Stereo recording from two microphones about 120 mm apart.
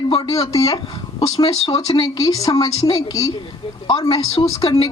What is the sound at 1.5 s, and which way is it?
Speech, 55° left (ahead or behind).